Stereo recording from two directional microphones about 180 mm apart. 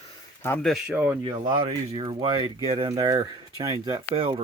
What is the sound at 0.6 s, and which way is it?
Speech, 5° right (ahead or behind).